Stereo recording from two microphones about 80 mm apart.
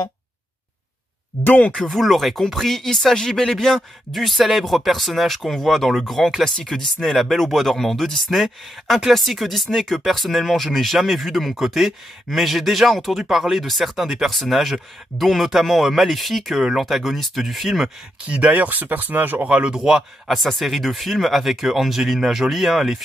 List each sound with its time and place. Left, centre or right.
1.4 s speech: left
1.7 s speech: centre
18.4 s speech: centre
19.4 s speech: centre